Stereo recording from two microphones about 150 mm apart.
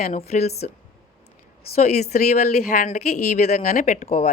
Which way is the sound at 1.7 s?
45° left (ahead or behind).